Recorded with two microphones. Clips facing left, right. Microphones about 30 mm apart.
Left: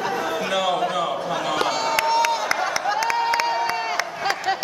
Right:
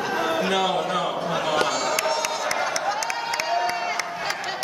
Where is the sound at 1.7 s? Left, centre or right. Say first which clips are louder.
Left 2 dB; centre.